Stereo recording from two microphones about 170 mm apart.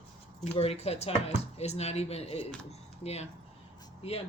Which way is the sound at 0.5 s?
35° left (ahead or behind).